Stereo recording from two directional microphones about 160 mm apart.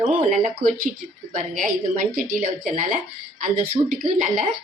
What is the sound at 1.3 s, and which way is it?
Speech, 50° right (ahead or behind).